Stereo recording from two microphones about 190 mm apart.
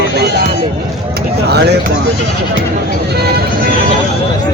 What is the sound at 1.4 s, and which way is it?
Speech, 60° right (ahead or behind).